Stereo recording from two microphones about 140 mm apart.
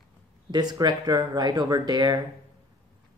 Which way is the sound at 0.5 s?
30° right (ahead or behind).